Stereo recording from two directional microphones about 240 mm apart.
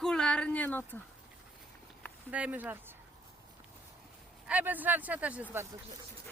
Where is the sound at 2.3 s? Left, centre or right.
Centre.